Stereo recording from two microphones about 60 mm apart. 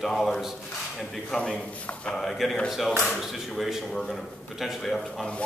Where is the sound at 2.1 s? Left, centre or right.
Centre.